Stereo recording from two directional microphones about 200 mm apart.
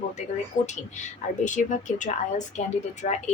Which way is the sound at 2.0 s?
40° left (ahead or behind).